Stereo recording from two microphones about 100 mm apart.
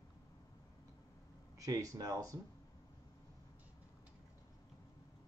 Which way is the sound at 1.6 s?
35° right (ahead or behind).